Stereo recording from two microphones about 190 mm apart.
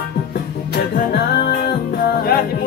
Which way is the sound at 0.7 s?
60° left (ahead or behind).